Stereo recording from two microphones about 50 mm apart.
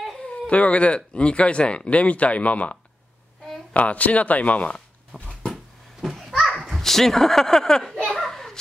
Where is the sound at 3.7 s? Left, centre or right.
Left.